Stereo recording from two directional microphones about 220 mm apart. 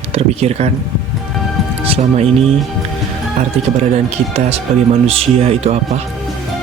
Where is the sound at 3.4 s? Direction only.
30° right (ahead or behind).